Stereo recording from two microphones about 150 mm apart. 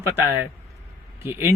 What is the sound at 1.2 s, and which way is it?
Speech, 15° right (ahead or behind).